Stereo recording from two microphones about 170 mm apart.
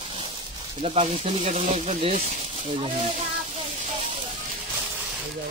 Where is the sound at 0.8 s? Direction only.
35° right (ahead or behind).